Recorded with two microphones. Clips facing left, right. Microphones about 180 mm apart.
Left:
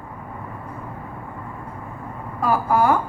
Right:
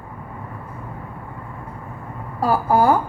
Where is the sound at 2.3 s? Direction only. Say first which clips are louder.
Right 2 dB; 35° right (ahead or behind).